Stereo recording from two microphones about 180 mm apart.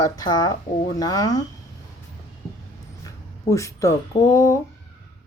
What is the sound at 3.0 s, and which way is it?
Speech, 15° left (ahead or behind).